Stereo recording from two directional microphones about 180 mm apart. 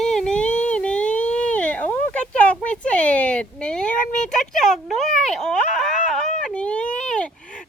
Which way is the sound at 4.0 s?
45° left (ahead or behind).